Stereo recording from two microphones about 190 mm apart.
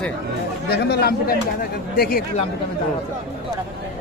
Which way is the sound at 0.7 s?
60° left (ahead or behind).